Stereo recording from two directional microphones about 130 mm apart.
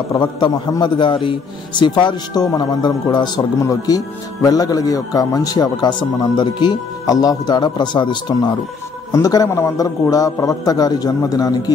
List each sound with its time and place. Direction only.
0.2 s a man's voice: 35° left (ahead or behind)